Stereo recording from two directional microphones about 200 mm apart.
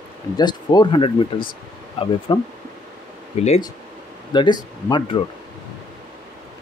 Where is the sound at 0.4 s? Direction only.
20° left (ahead or behind).